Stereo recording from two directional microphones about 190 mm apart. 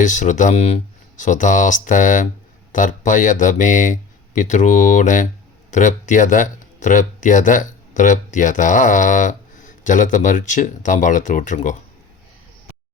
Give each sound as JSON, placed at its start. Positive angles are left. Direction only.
{"t": 0.0, "sound": "speech", "side_deg": 40}